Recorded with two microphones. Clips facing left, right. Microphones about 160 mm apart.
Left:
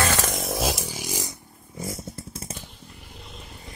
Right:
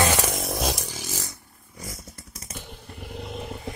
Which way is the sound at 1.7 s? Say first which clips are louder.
Left 7 dB; 25° left (ahead or behind).